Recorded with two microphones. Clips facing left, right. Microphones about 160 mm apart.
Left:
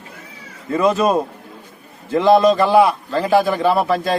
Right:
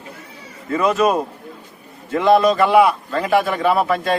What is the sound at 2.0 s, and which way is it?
A man's voice, 35° left (ahead or behind).